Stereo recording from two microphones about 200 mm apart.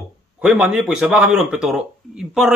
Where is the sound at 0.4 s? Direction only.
5° right (ahead or behind).